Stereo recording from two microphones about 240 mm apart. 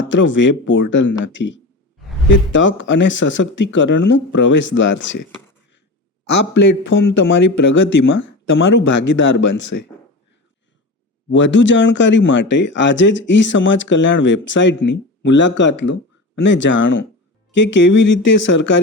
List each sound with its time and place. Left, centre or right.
0.1 s speech: left
6.3 s speech: left
11.3 s speech: left